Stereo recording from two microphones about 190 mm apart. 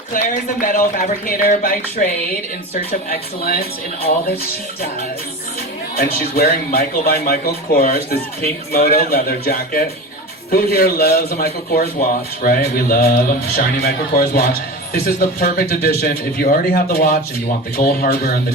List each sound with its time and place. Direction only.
0.6 s speech: 45° left (ahead or behind)
6.0 s speech: 55° left (ahead or behind)